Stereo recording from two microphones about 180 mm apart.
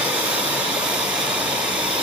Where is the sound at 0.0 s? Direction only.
5° right (ahead or behind).